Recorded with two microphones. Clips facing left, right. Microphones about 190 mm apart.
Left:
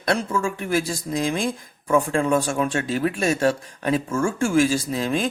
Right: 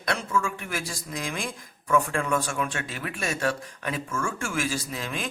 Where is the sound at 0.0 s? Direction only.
35° left (ahead or behind).